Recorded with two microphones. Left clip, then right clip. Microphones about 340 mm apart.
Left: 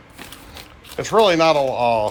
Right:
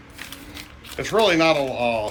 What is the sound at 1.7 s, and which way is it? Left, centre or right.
Speech, left.